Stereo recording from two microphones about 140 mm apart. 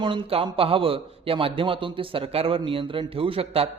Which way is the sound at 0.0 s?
40° right (ahead or behind).